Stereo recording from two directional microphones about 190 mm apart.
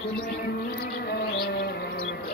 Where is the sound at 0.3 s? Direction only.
60° left (ahead or behind).